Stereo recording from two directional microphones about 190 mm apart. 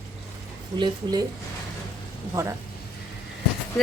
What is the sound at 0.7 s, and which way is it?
Speech, 25° right (ahead or behind).